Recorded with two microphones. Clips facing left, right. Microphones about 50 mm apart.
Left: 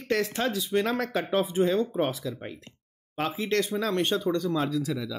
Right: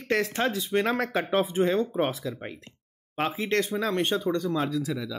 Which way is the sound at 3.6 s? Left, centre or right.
Centre.